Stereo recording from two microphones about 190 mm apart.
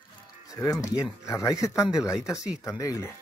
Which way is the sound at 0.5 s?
20° left (ahead or behind).